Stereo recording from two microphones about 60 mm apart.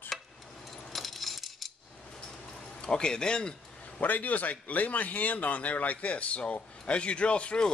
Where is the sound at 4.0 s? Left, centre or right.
Left.